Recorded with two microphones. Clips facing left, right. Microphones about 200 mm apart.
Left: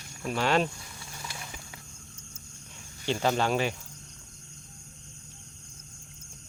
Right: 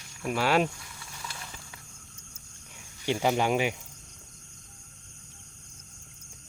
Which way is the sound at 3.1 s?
15° right (ahead or behind).